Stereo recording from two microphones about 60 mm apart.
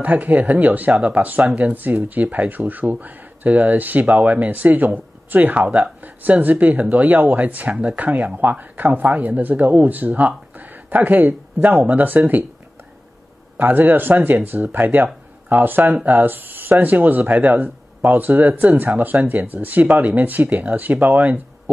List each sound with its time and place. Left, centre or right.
0.0 s speech: right
13.6 s speech: right